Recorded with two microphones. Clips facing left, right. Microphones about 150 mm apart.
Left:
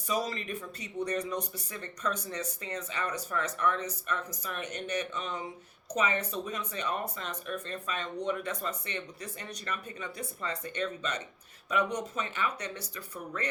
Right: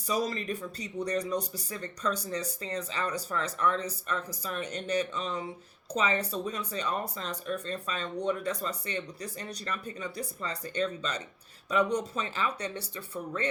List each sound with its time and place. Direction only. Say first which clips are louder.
0.1 s speech: right 2 dB; 35° right (ahead or behind)